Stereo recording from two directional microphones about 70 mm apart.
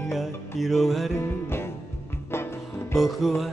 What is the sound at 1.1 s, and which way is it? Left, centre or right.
Music, left.